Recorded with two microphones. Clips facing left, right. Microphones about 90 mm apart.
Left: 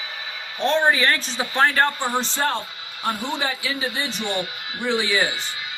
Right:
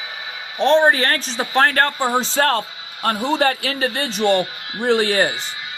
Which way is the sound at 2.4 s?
90° right.